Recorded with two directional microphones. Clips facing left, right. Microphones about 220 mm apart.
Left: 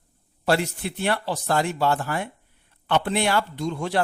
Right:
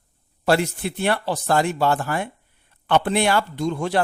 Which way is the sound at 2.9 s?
50° right (ahead or behind).